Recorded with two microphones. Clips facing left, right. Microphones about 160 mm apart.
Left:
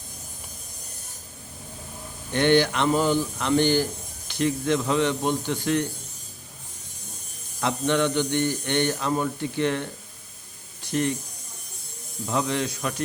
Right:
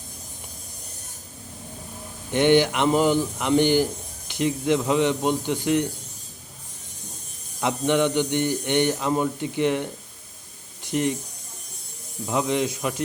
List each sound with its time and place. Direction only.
2.3 s speech: 15° right (ahead or behind)
7.6 s speech: 15° right (ahead or behind)
12.2 s speech: 15° right (ahead or behind)